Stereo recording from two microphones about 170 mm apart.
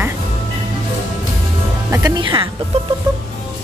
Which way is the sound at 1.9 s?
20° right (ahead or behind).